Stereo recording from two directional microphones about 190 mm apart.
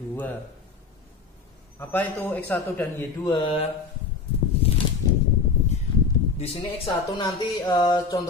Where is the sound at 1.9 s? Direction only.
10° left (ahead or behind).